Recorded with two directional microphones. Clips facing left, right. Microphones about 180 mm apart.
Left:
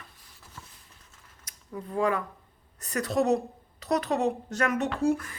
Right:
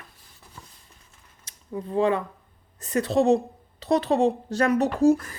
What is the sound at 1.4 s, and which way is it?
A woman's voice, 25° right (ahead or behind).